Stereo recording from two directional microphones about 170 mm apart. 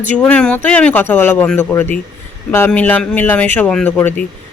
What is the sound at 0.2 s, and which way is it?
Speech, 5° left (ahead or behind).